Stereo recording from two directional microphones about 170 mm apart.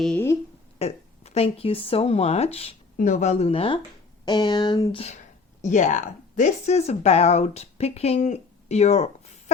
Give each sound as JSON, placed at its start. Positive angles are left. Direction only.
{"t": 0.0, "sound": "a woman's voice", "side_deg": 5}
{"t": 0.8, "sound": "speech", "side_deg": 40}
{"t": 3.0, "sound": "speech", "side_deg": 45}